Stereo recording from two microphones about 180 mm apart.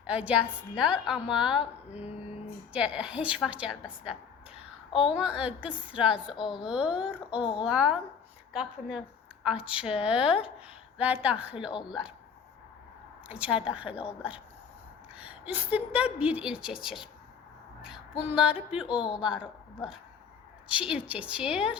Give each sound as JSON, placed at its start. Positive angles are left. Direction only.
{"t": 0.0, "sound": "a woman's voice", "side_deg": -5}
{"t": 2.0, "sound": "a sound", "side_deg": 35}
{"t": 2.7, "sound": "a woman's voice", "side_deg": -5}
{"t": 5.1, "sound": "a woman's voice", "side_deg": -5}
{"t": 13.2, "sound": "a woman's voice", "side_deg": -5}
{"t": 15.1, "sound": "a woman's voice", "side_deg": -5}
{"t": 18.2, "sound": "speech", "side_deg": -5}